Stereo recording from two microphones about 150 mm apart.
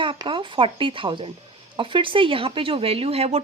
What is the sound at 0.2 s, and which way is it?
Speech, 35° right (ahead or behind).